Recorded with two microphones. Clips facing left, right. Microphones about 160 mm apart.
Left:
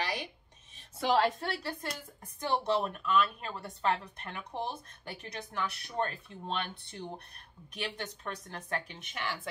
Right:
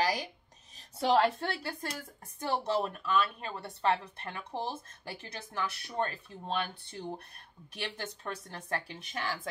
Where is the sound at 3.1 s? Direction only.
30° right (ahead or behind).